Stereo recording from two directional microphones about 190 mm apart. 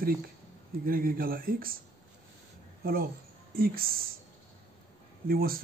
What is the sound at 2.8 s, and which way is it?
Speech, 50° right (ahead or behind).